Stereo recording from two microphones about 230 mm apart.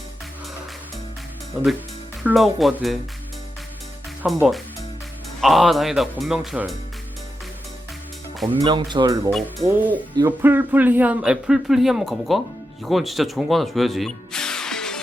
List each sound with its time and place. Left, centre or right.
1.5 s speech: centre
4.2 s speech: centre
8.5 s speech: centre
9.3 s a man's voice: centre